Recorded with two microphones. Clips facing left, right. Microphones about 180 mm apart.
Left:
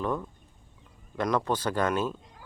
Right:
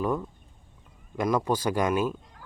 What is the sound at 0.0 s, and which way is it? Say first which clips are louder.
Speech: right 3 dB; 10° right (ahead or behind).